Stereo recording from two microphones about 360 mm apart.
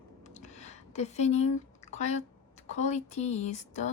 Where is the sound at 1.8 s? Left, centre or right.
Centre.